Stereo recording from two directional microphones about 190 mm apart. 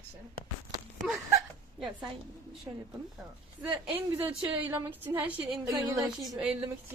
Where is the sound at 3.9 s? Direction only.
10° right (ahead or behind).